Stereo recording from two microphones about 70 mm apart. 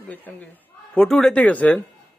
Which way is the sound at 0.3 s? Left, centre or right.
Left.